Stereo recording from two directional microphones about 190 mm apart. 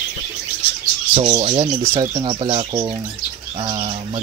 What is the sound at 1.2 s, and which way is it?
Speech, 25° right (ahead or behind).